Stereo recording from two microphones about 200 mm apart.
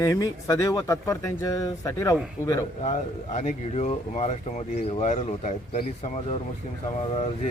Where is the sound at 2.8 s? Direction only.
35° left (ahead or behind).